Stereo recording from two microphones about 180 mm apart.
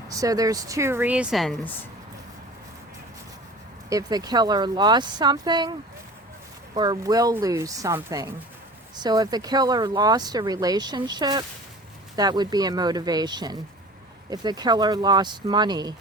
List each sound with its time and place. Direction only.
0.1 s a woman's voice: 20° right (ahead or behind); by 1.5 s centre (ahead or behind)
3.8 s speech: 20° right (ahead or behind)
6.7 s speech: 20° right (ahead or behind)